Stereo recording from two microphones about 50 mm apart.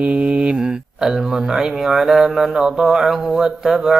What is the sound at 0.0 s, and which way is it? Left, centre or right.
Mantra, right.